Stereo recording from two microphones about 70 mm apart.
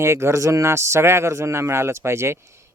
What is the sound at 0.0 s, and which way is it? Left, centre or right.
Speech, right.